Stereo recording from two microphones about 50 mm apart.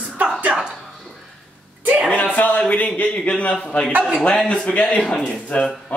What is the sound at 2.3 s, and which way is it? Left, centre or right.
A woman's voice, left.